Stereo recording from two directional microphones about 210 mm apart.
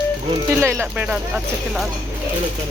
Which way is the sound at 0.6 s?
10° right (ahead or behind).